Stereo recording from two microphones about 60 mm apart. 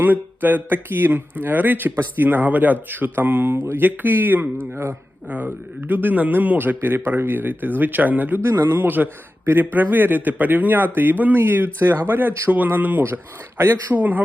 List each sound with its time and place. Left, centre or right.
0.0 s speech: right
4.7 s speech: right
5.3 s speech: right